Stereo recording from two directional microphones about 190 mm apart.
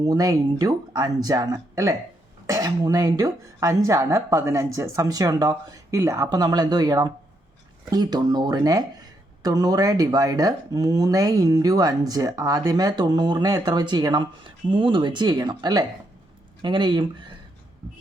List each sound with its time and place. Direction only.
0.0 s speech: 20° right (ahead or behind)